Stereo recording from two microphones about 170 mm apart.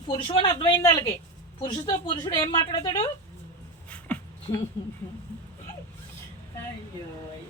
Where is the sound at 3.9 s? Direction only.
10° left (ahead or behind).